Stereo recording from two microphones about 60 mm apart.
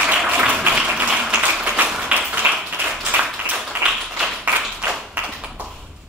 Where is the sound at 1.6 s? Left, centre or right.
Right.